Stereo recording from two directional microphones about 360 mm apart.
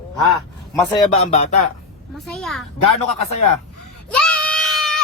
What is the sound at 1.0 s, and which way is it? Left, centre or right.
Speech, centre.